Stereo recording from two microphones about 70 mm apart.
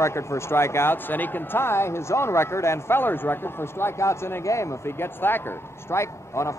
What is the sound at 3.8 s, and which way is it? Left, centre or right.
A man's voice, left.